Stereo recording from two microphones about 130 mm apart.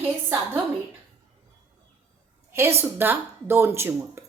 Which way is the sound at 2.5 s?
20° right (ahead or behind).